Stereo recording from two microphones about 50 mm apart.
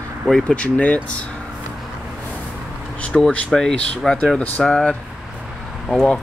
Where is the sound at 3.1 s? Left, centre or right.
Left.